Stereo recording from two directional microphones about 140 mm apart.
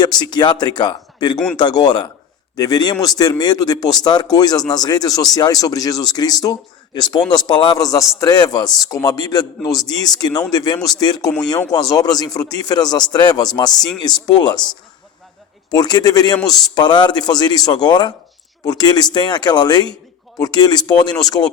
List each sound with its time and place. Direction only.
0.0 s speech: 30° left (ahead or behind)
15.7 s speech: 30° left (ahead or behind)